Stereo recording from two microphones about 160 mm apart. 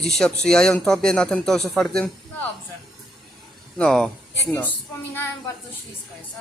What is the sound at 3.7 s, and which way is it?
Speech, 5° left (ahead or behind).